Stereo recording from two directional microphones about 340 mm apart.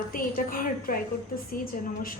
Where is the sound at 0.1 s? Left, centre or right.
Left.